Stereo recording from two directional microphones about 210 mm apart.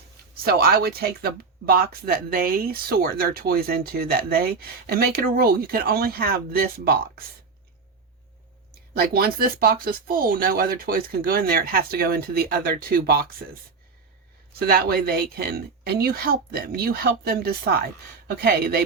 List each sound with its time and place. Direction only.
0.4 s speech: 45° right (ahead or behind)
8.9 s speech: 50° right (ahead or behind)
14.7 s speech: 45° right (ahead or behind)